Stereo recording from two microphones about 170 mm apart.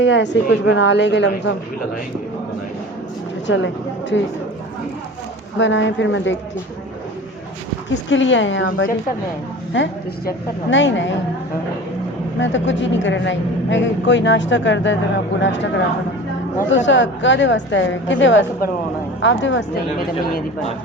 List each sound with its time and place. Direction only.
0.0 s speech: 90° left
3.4 s a woman's voice: 90° left
5.5 s speech: 90° left
8.1 s speech: 90° left
9.7 s speech: 90° left
12.4 s speech: 90° left